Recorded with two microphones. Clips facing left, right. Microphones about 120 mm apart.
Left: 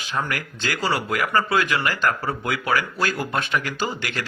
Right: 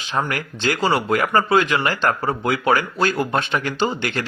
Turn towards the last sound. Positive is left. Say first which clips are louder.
# right 5 dB
turn(degrees=-25)  # may be behind; listen again after turning